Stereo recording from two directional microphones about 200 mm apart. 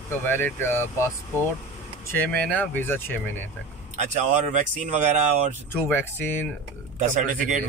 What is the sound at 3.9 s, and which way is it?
A man's voice, 40° right (ahead or behind).